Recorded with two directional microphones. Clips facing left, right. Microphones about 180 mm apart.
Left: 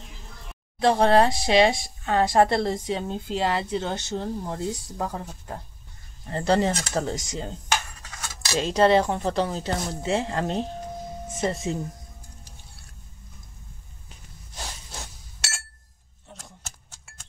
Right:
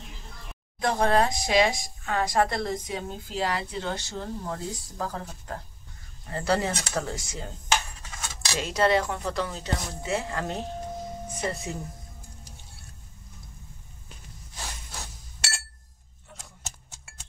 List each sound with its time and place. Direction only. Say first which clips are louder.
0.7 s speech: left 5 dB; 30° left (ahead or behind)
8.5 s speech: left 5 dB; 25° left (ahead or behind)